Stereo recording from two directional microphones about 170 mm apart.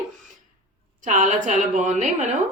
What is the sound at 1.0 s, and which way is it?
A woman's voice, 45° right (ahead or behind).